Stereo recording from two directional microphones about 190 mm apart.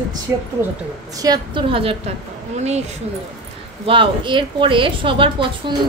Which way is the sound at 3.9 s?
25° right (ahead or behind).